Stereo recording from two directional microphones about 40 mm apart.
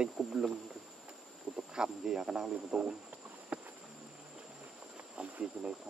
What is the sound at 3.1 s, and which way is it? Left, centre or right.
Insect, right.